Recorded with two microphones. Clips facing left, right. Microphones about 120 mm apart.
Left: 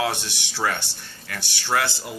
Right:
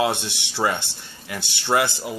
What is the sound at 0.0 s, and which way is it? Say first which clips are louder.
Speech: right 3 dB; 20° right (ahead or behind).